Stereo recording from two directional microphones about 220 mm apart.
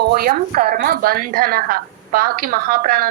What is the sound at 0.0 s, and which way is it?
Speech, 45° right (ahead or behind).